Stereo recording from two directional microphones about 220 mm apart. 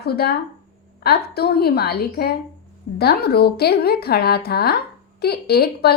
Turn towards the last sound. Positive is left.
turn(degrees=45)  # may be behind; listen again after turning